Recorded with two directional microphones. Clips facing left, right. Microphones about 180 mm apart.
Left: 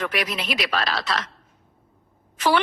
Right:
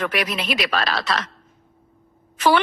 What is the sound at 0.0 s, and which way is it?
A woman's voice, 65° right (ahead or behind).